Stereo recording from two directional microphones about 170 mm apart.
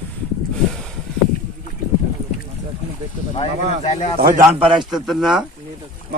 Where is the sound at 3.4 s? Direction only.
40° left (ahead or behind).